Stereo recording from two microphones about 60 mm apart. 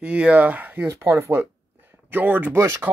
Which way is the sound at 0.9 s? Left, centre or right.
Right.